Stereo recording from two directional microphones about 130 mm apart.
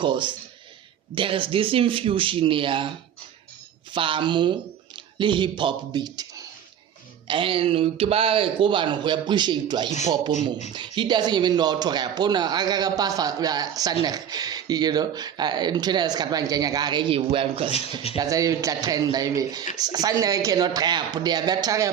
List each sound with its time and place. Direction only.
0.0 s speech: 40° right (ahead or behind)
3.9 s speech: 40° right (ahead or behind)
7.3 s speech: 40° right (ahead or behind)
18.2 s speech: 25° right (ahead or behind)